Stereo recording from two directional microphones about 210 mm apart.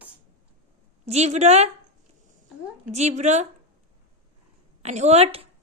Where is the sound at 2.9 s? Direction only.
35° right (ahead or behind).